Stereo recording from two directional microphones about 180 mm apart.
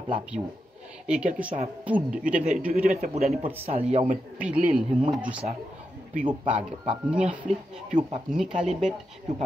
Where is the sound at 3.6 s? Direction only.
35° right (ahead or behind).